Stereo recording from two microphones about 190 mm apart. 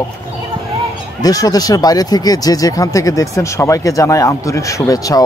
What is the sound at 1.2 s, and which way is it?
Speech, 20° left (ahead or behind).